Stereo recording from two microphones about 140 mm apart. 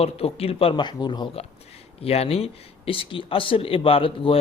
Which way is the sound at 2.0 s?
45° left (ahead or behind).